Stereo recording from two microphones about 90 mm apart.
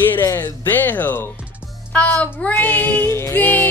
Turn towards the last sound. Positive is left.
turn(degrees=20)  # may be behind; listen again after turning